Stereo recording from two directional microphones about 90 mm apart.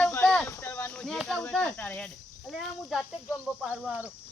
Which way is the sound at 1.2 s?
5° left (ahead or behind).